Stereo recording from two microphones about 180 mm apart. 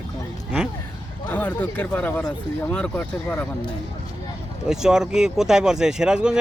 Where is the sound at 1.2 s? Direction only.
10° left (ahead or behind).